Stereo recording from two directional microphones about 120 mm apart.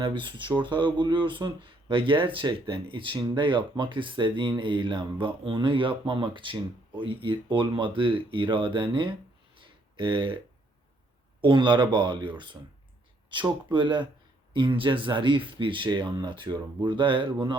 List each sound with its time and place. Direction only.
0.0 s speech: 45° right (ahead or behind)
9.6 s a sound: 45° right (ahead or behind)
11.3 s speech: 40° right (ahead or behind)